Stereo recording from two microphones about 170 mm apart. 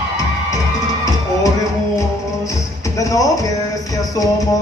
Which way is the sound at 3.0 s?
20° left (ahead or behind).